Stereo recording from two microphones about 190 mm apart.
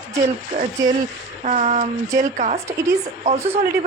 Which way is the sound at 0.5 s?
30° right (ahead or behind).